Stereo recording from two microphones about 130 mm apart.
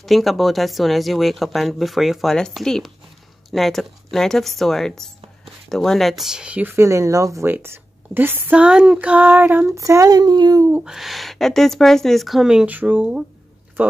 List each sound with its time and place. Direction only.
0.0 s speech: centre (ahead or behind); by 10.7 s 30° right (ahead or behind)
10.7 s speech: 5° right (ahead or behind)